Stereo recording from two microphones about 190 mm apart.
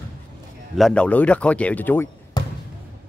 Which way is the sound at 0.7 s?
5° left (ahead or behind).